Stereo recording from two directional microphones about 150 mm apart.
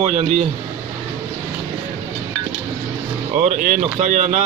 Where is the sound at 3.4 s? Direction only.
60° right (ahead or behind).